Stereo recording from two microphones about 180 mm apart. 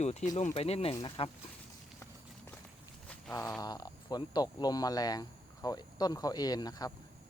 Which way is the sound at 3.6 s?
20° left (ahead or behind).